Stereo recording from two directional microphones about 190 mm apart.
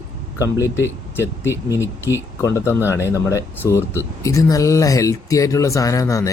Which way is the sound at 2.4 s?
15° left (ahead or behind).